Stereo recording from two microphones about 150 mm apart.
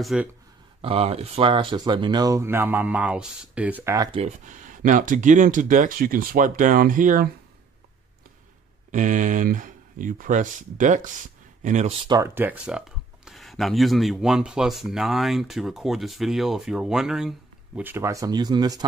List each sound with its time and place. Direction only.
0.0 s speech: 5° right (ahead or behind)
0.8 s speech: 40° right (ahead or behind); by 3.9 s 10° right (ahead or behind)
4.5 s speech: 60° right (ahead or behind)
8.9 s speech: 60° right (ahead or behind)
12.0 s speech: 30° right (ahead or behind)
12.4 s speech: 10° right (ahead or behind)
17.7 s speech: 15° right (ahead or behind)